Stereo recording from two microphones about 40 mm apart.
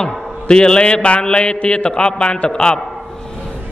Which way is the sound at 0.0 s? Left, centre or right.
Left.